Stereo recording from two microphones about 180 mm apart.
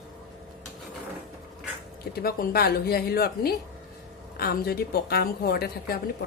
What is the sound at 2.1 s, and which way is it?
A woman's voice, 60° left (ahead or behind).